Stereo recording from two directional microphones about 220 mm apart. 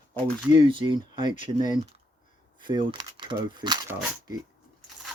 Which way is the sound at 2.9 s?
20° right (ahead or behind).